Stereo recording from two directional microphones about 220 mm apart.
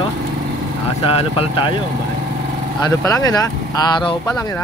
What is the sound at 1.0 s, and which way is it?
Speech, 25° left (ahead or behind).